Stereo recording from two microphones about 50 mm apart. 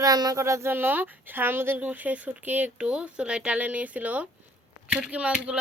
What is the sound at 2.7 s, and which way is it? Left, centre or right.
Speech, right.